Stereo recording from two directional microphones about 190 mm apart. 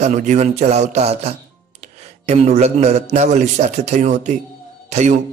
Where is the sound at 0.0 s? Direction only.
40° right (ahead or behind).